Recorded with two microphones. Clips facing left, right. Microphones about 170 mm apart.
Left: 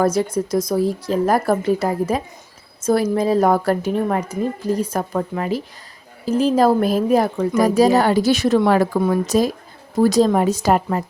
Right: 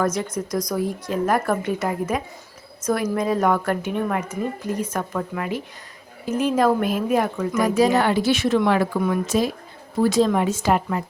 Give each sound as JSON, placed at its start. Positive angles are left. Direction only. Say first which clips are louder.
{"t": 0.0, "sound": "a woman's voice", "louder": "left 5 dB", "side_deg": 30}